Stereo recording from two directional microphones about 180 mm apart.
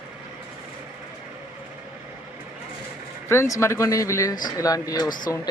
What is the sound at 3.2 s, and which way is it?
Speech, 15° left (ahead or behind).